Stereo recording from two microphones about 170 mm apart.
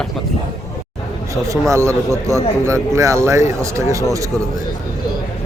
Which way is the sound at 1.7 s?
15° right (ahead or behind).